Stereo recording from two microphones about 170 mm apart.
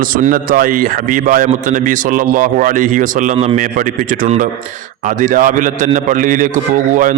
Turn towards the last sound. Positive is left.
turn(degrees=-50)  # may be behind; listen again after turning